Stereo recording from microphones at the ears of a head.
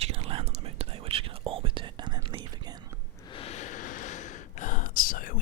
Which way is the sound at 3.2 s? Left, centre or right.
Left.